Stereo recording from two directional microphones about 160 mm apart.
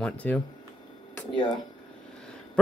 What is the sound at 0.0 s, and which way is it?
Speech, 10° left (ahead or behind).